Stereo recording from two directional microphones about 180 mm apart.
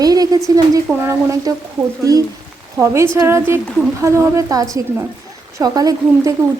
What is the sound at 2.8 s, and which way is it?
A woman's voice, 15° right (ahead or behind).